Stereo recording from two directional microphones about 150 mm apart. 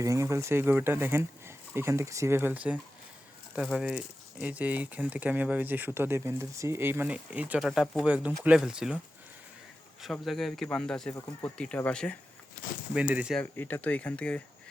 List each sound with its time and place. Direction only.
0.0 s speech: 20° right (ahead or behind); by 9.0 s 5° right (ahead or behind)
10.0 s speech: centre (ahead or behind)
12.9 s speech: 10° right (ahead or behind)
13.4 s speech: 15° left (ahead or behind)